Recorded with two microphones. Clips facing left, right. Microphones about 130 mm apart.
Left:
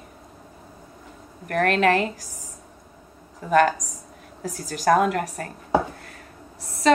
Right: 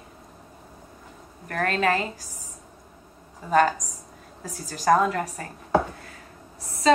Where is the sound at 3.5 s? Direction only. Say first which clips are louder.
Left 2 dB; 65° left (ahead or behind).